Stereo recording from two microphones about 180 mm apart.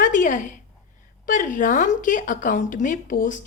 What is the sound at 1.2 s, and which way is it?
A woman's voice, 50° left (ahead or behind).